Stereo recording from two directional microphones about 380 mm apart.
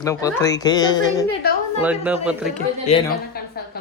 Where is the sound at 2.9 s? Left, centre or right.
Left.